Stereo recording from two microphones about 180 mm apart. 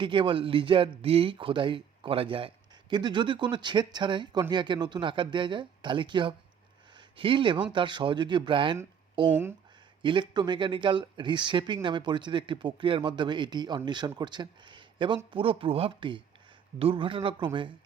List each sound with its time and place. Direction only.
0.0 s speech: 30° right (ahead or behind)